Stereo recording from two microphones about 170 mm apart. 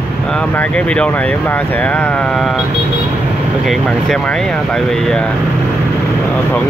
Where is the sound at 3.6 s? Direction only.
Centre (ahead or behind).